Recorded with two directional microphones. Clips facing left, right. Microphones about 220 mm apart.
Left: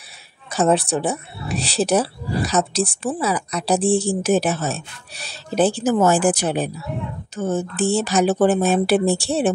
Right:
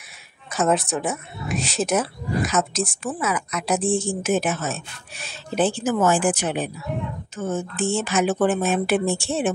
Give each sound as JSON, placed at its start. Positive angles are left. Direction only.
{"t": 0.5, "sound": "a woman's voice", "side_deg": 35}